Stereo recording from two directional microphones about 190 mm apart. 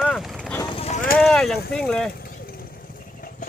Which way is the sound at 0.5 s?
20° left (ahead or behind).